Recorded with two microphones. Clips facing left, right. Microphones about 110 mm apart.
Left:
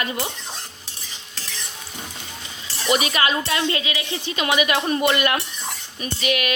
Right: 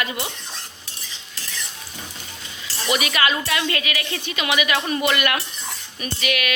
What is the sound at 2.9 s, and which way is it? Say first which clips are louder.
A woman's voice: left 1 dB; 30° left (ahead or behind).